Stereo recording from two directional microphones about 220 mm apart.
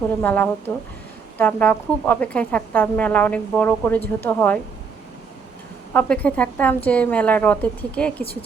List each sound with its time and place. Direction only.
0.2 s speech: 10° left (ahead or behind)
5.9 s speech: 5° left (ahead or behind)
8.2 s speech: 25° left (ahead or behind)